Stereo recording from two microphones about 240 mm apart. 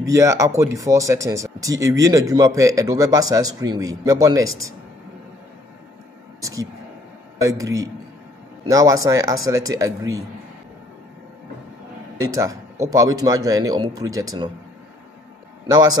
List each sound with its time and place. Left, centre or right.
0.0 s speech: centre
6.4 s speech: centre
12.2 s speech: centre
15.6 s a man's voice: centre